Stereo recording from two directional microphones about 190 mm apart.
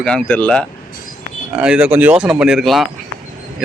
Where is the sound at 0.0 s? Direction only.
5° left (ahead or behind).